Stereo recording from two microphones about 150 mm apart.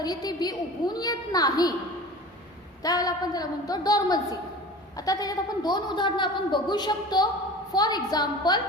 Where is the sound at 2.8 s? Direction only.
25° left (ahead or behind).